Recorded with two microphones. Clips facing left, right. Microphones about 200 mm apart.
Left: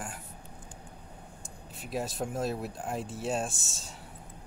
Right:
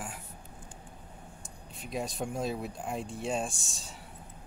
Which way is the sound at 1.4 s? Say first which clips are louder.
Left 1 dB; centre (ahead or behind).